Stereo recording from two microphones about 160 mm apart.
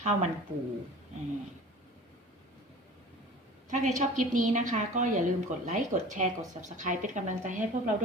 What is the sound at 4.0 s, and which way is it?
Speech, 50° right (ahead or behind).